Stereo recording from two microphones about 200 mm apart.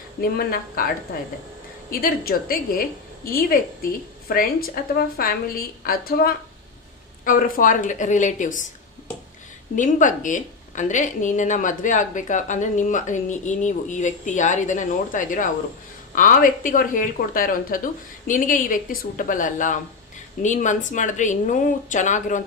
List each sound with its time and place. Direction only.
0.2 s a woman's voice: 50° left (ahead or behind)
1.9 s a woman's voice: 50° left (ahead or behind)
4.3 s a woman's voice: 50° left (ahead or behind)
9.7 s a woman's voice: 40° left (ahead or behind)